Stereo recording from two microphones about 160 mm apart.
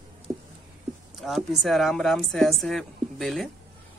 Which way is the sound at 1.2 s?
Centre (ahead or behind).